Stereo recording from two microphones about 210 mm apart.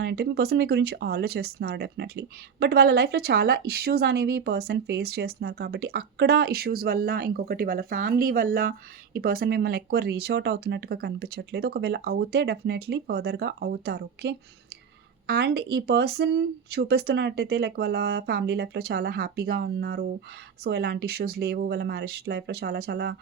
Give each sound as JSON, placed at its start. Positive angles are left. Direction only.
{"t": 0.0, "sound": "speech", "side_deg": -50}